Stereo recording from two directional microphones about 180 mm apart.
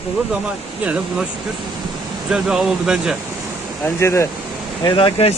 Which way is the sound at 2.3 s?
5° right (ahead or behind).